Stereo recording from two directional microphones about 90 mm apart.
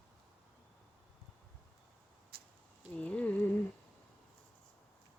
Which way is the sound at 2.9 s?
15° left (ahead or behind).